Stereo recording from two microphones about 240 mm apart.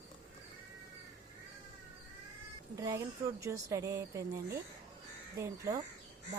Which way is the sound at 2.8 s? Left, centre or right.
Centre.